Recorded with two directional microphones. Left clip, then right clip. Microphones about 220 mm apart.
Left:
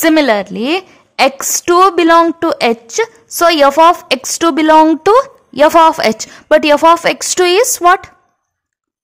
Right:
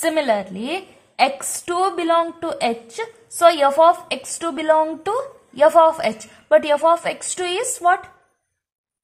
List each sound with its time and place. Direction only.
0.0 s a woman's voice: 50° left (ahead or behind)